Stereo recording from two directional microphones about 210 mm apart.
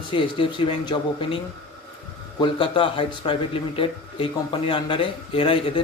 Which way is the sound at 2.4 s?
25° left (ahead or behind).